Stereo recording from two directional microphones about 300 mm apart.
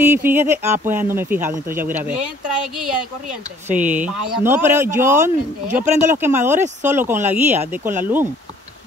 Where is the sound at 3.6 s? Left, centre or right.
Centre.